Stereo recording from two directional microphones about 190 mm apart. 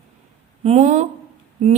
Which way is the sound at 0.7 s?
35° right (ahead or behind).